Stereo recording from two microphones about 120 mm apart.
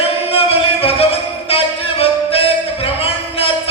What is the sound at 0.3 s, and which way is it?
Music, 55° left (ahead or behind).